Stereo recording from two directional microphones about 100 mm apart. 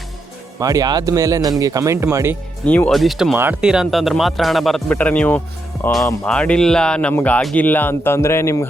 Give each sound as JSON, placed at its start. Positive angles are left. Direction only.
{"t": 0.6, "sound": "speech", "side_deg": -40}
{"t": 2.6, "sound": "speech", "side_deg": 15}
{"t": 2.9, "sound": "speech", "side_deg": 0}
{"t": 4.9, "sound": "speech", "side_deg": 15}